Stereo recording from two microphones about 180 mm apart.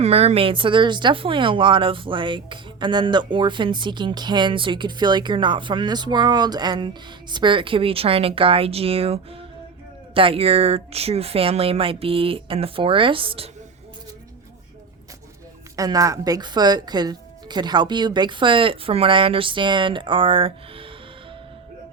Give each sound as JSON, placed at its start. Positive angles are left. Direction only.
{"t": 0.0, "sound": "speech", "side_deg": -35}
{"t": 15.7, "sound": "speech", "side_deg": -20}